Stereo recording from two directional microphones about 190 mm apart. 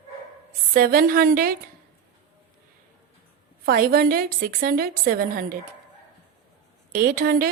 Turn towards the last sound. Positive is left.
turn(degrees=-50)  # may be behind; listen again after turning